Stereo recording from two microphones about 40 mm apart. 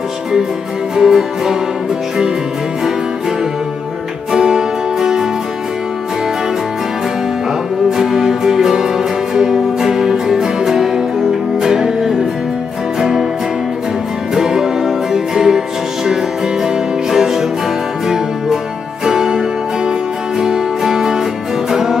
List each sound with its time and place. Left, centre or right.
0.9 s music: centre
4.3 s music: centre
7.9 s music: centre
14.3 s music: centre
16.6 s music: centre